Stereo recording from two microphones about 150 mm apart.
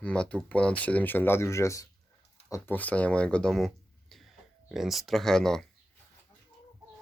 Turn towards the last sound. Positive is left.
turn(degrees=5)  # may be behind; listen again after turning